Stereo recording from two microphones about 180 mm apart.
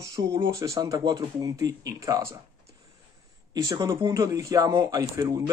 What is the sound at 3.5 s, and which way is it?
Speech, 20° right (ahead or behind).